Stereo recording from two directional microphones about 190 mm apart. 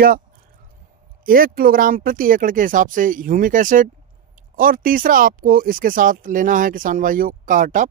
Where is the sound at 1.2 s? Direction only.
50° right (ahead or behind).